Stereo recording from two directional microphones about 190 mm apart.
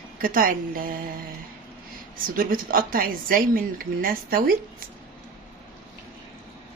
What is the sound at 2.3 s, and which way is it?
A woman's voice, 45° right (ahead or behind).